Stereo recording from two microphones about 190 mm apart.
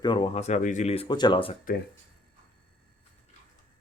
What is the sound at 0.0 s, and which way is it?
Speech, 25° left (ahead or behind).